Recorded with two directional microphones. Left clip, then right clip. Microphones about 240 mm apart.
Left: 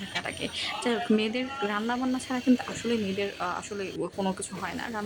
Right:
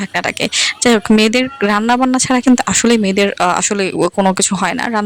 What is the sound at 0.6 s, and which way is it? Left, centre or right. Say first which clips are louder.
Speech: right 15 dB; right.